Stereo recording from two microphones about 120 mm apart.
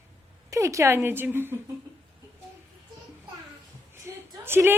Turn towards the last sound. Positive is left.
turn(degrees=-20)  # may be behind; listen again after turning